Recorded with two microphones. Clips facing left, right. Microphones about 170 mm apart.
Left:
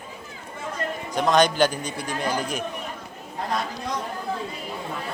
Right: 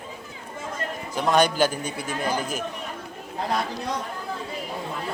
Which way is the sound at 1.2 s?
10° right (ahead or behind).